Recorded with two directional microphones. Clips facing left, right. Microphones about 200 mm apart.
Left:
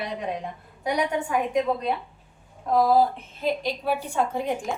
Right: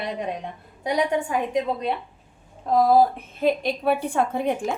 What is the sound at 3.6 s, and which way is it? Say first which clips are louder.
Speech: right 4 dB; 60° right (ahead or behind).